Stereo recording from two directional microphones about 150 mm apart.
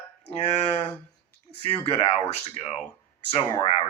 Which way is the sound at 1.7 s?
40° left (ahead or behind).